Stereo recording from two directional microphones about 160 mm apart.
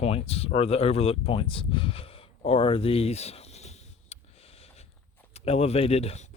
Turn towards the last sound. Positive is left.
turn(degrees=40)  # may be behind; listen again after turning